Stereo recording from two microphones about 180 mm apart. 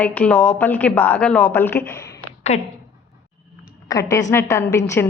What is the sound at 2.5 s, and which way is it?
Speech, 35° left (ahead or behind).